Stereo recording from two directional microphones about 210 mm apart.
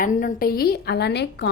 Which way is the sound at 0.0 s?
45° left (ahead or behind).